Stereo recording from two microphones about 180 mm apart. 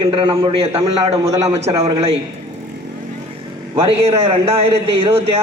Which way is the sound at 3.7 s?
30° right (ahead or behind).